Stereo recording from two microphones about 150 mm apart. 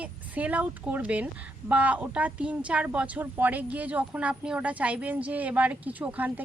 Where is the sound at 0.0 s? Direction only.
10° right (ahead or behind).